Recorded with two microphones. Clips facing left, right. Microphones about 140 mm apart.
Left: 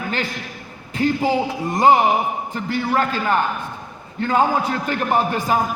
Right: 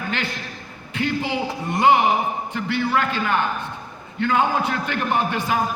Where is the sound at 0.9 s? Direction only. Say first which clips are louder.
Left 5 dB; 40° left (ahead or behind).